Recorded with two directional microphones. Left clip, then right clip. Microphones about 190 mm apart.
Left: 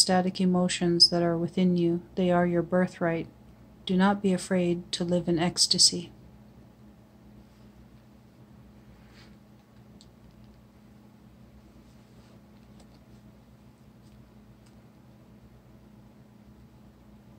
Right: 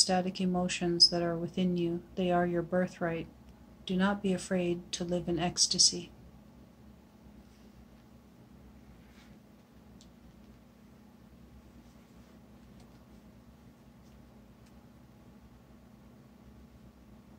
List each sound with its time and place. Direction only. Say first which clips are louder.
0.0 s speech: left 5 dB; 45° left (ahead or behind)